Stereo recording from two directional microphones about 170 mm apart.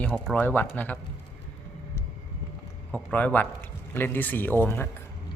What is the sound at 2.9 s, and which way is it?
A man's voice, 10° left (ahead or behind).